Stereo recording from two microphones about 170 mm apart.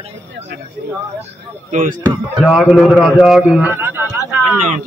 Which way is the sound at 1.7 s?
50° right (ahead or behind).